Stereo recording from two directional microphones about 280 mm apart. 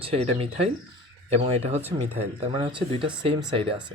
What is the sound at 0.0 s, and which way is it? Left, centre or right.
Speech, right.